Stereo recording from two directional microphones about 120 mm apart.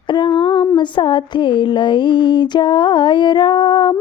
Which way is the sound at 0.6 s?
40° left (ahead or behind).